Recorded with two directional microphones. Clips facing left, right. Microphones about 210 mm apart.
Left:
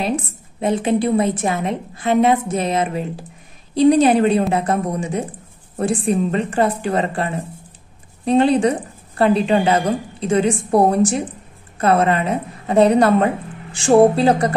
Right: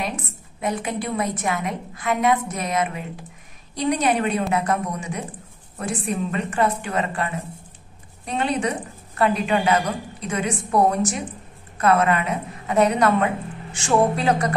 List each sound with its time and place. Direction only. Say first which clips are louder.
0.6 s a woman's voice: left 8 dB; 30° left (ahead or behind)